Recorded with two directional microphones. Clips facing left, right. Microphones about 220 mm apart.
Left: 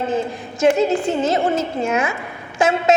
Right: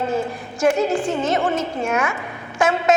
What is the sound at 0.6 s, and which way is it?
A woman's voice, 25° left (ahead or behind).